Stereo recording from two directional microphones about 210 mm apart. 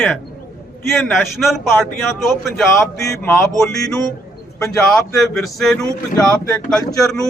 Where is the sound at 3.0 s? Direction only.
15° left (ahead or behind).